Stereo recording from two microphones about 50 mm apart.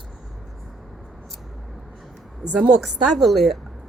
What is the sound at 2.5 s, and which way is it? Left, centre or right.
Speech, right.